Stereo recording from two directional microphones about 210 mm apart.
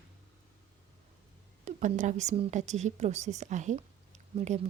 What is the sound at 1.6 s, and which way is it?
A woman's voice, 35° right (ahead or behind).